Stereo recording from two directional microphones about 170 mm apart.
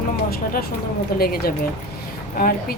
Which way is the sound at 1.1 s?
65° left (ahead or behind).